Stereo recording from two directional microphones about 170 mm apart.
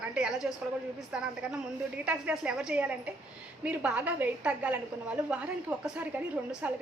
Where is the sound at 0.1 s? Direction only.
5° right (ahead or behind).